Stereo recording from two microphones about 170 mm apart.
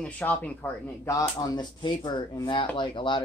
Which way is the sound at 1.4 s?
25° left (ahead or behind).